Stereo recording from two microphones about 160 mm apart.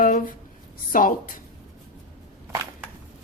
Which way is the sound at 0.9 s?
60° left (ahead or behind).